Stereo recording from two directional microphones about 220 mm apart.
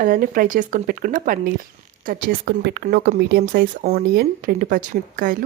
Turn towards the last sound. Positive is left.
turn(degrees=-40)  # may be behind; listen again after turning